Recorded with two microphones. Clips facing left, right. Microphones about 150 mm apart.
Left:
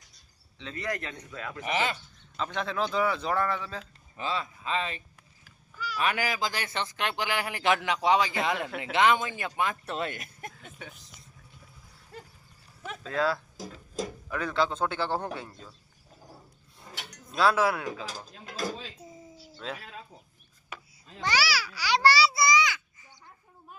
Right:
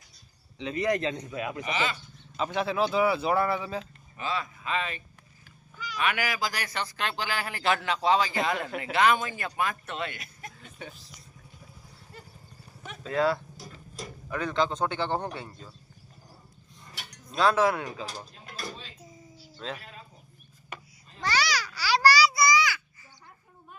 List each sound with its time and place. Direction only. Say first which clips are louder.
0.6 s a man's voice: right 8 dB; 20° right (ahead or behind)
1.6 s speech: left 3 dB; 60° left (ahead or behind)
2.3 s speech: right 3 dB; 10° right (ahead or behind)
4.2 s speech: even; 30° left (ahead or behind)
9.8 s speech: left 2 dB; 40° left (ahead or behind)
10.6 s a sound: right 2 dB; centre (ahead or behind)
13.0 s speech: right 3 dB; centre (ahead or behind)
16.8 s a sound: left 3 dB; 90° left
17.3 s speech: right 1 dB; 5° left (ahead or behind)
18.1 s a sound: left 1 dB; 90° left
19.6 s speech: right 1 dB; 5° left (ahead or behind)
21.2 s babbling: even; 10° left (ahead or behind)